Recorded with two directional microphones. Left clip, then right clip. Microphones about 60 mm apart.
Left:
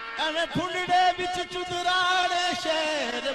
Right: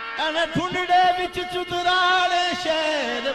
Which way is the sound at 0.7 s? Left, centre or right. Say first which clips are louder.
Right 4 dB; left.